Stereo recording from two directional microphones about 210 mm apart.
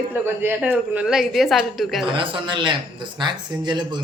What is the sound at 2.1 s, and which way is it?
A man's voice, 25° right (ahead or behind).